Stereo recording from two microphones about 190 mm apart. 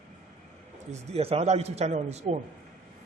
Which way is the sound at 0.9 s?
30° right (ahead or behind).